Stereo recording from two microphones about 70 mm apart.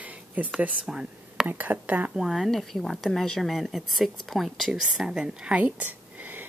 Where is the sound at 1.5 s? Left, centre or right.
Right.